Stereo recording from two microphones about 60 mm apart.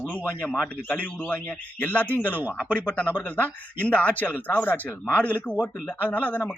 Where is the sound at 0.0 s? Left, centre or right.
Left.